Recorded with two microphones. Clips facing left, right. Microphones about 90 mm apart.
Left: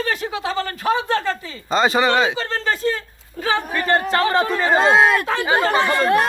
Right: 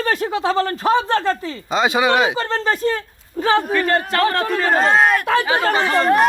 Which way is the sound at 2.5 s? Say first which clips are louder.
Right 2 dB; 30° right (ahead or behind).